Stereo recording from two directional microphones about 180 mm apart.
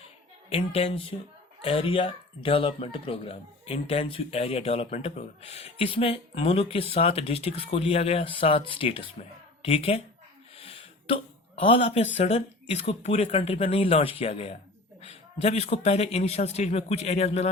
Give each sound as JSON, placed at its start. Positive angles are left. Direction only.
{"t": 0.5, "sound": "speech", "side_deg": 35}